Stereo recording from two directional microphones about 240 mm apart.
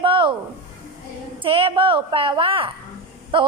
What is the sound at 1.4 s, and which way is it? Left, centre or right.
A child's voice, right.